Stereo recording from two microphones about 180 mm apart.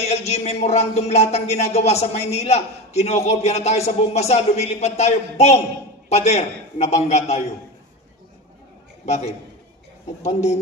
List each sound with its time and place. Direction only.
0.0 s speech: 35° left (ahead or behind)
9.0 s a man's voice: 40° left (ahead or behind)